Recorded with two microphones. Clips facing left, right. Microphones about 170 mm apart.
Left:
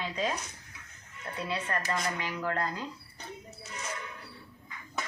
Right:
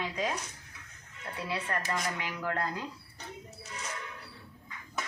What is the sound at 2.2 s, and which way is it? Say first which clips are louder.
Speech: left 2 dB; 15° right (ahead or behind).